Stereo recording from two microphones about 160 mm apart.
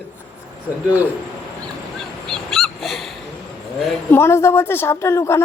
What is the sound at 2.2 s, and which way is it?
Dog, centre (ahead or behind).